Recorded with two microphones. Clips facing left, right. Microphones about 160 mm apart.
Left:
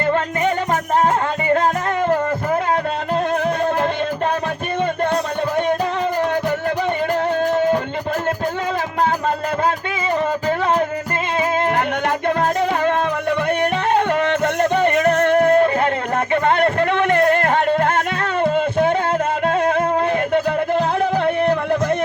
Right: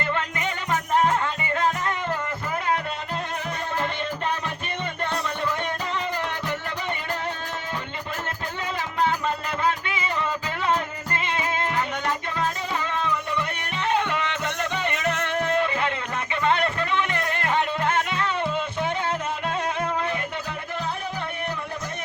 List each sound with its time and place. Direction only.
0.7 s music: 45° left (ahead or behind)
7.5 s music: 50° left (ahead or behind)
12.0 s music: 60° left (ahead or behind)
20.3 s music: 70° left (ahead or behind)